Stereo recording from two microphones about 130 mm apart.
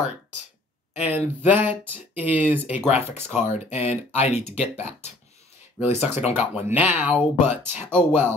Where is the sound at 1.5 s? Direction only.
15° right (ahead or behind).